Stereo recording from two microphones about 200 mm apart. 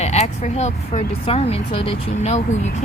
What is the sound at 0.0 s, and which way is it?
Speech, 35° left (ahead or behind).